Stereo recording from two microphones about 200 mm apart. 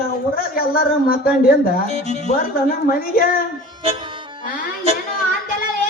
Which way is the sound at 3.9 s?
25° right (ahead or behind).